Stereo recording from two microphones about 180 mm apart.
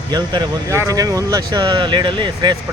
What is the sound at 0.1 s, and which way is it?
Speech, 20° right (ahead or behind).